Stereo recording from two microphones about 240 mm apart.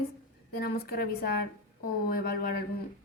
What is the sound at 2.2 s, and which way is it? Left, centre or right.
Speech, left.